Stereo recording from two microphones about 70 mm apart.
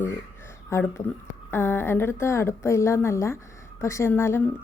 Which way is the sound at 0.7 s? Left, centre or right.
Left.